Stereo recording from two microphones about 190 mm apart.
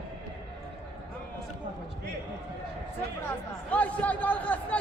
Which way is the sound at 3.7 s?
5° left (ahead or behind).